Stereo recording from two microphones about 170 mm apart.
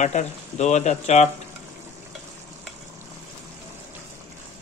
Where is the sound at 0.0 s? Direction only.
45° left (ahead or behind).